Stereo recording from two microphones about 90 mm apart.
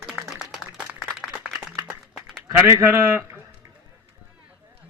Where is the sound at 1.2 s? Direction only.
Centre (ahead or behind).